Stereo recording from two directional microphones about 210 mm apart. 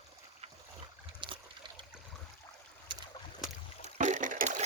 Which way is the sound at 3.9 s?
35° right (ahead or behind).